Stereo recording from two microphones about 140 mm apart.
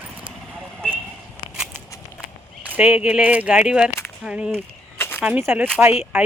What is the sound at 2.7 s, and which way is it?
Speech, 10° right (ahead or behind).